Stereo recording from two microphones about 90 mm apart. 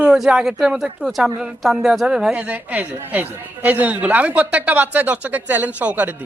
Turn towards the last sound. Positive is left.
turn(degrees=-15)  # may be behind; listen again after turning